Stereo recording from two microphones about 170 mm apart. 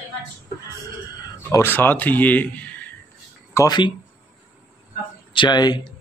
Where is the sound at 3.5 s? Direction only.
20° left (ahead or behind).